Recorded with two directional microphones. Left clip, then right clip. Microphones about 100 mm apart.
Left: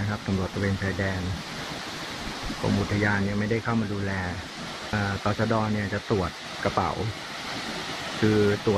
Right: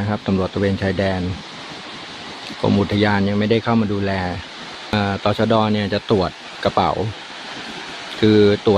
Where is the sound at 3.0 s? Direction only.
25° right (ahead or behind).